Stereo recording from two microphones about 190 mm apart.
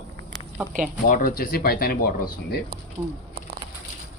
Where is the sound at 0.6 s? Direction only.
15° right (ahead or behind).